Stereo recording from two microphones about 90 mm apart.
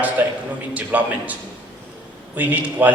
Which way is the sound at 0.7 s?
20° right (ahead or behind).